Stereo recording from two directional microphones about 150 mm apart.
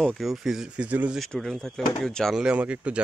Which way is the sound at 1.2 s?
5° left (ahead or behind).